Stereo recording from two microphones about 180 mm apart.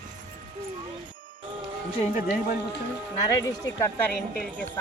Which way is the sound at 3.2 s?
20° left (ahead or behind).